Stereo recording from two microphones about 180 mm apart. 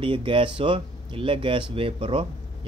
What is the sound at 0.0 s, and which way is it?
Speech, 30° right (ahead or behind).